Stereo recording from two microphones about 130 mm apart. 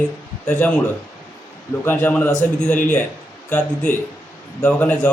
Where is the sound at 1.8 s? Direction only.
15° left (ahead or behind).